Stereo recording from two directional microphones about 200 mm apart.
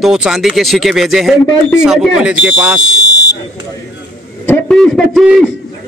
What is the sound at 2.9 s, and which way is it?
Speech, 65° left (ahead or behind).